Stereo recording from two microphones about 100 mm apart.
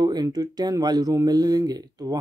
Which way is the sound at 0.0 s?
40° right (ahead or behind).